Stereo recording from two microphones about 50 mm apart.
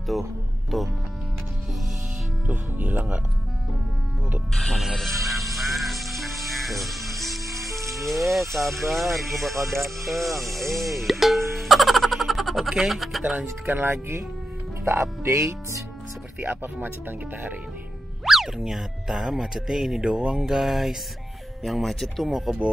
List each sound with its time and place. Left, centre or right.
0.1 s speech: centre
2.4 s speech: right
4.6 s speech: centre
5.2 s music: centre
8.3 s speech: centre
13.2 s speech: right
13.7 s speech: right
14.9 s speech: right
18.2 s speech: centre